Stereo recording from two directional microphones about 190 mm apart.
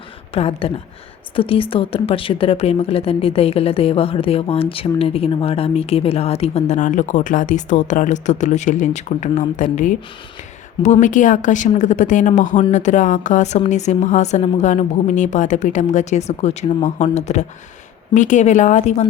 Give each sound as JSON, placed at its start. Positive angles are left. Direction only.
{"t": 0.3, "sound": "a woman's voice", "side_deg": 30}
{"t": 11.0, "sound": "a woman's voice", "side_deg": 40}